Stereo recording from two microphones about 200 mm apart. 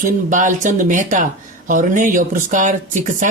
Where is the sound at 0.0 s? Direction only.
40° right (ahead or behind).